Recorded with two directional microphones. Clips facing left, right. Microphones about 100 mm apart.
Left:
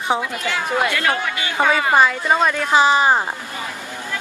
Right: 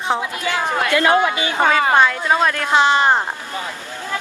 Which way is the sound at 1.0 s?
25° right (ahead or behind).